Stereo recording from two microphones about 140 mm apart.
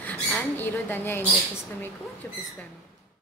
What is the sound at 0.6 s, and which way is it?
Speech, 15° left (ahead or behind).